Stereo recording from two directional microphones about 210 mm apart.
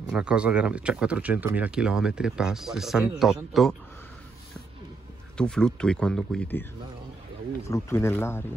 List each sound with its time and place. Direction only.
0.1 s speech: 5° right (ahead or behind)
5.4 s speech: 5° left (ahead or behind)